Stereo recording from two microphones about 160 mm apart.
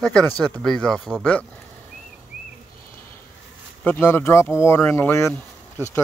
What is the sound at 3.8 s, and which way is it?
Speech, 15° left (ahead or behind).